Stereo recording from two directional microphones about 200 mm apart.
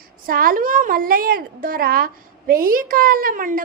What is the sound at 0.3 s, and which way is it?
Speech, 45° right (ahead or behind).